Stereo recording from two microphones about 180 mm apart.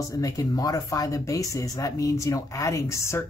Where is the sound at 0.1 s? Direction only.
20° left (ahead or behind).